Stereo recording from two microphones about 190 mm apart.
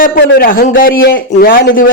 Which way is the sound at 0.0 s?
50° left (ahead or behind).